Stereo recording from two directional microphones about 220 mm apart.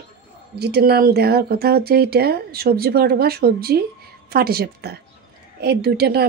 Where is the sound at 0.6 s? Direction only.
45° right (ahead or behind).